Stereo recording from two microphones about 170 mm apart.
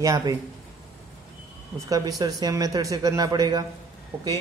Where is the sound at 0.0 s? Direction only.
20° right (ahead or behind).